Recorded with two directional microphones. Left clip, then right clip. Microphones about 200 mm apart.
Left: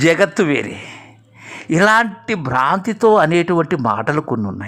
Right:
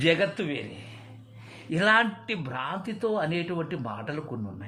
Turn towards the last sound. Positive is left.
turn(degrees=40)  # may be behind; listen again after turning